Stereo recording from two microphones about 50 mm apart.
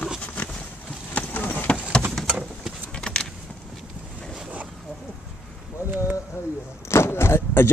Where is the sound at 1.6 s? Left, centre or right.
Left.